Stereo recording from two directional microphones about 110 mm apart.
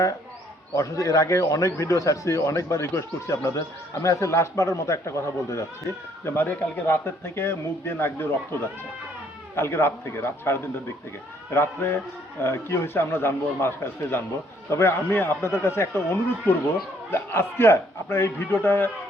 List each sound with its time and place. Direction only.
0.8 s speech: 30° left (ahead or behind)
9.6 s speech: 20° left (ahead or behind)